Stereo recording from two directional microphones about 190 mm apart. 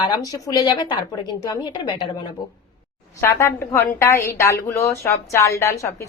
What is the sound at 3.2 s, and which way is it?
A woman's voice, 15° left (ahead or behind).